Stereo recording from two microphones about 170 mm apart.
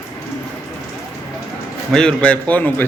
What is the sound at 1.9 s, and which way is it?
Speech, 5° left (ahead or behind).